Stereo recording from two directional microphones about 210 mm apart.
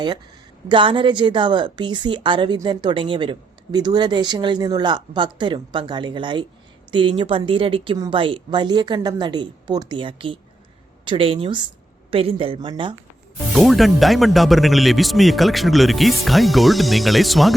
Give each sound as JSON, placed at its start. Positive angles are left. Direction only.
{"t": 0.7, "sound": "a woman's voice", "side_deg": -25}
{"t": 13.5, "sound": "a man's voice", "side_deg": 0}